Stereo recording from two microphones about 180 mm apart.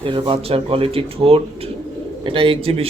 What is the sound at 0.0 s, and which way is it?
Speech, 30° right (ahead or behind).